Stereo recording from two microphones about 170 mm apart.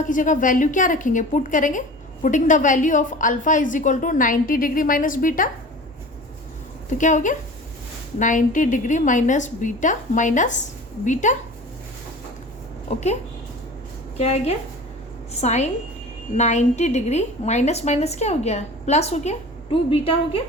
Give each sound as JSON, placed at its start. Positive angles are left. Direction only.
{"t": 0.0, "sound": "a woman's voice", "side_deg": 50}
{"t": 7.0, "sound": "a woman's voice", "side_deg": 50}
{"t": 12.9, "sound": "a woman's voice", "side_deg": 40}
{"t": 14.2, "sound": "a woman's voice", "side_deg": 40}